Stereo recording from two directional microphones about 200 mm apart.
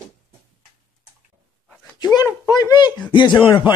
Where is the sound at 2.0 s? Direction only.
20° left (ahead or behind).